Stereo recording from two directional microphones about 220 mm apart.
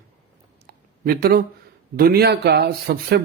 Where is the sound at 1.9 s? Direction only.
45° right (ahead or behind).